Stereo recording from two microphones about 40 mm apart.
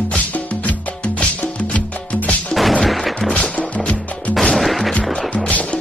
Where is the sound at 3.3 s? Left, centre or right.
Left.